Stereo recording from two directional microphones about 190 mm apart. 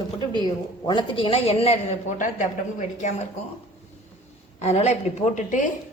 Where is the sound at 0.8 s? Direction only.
25° left (ahead or behind).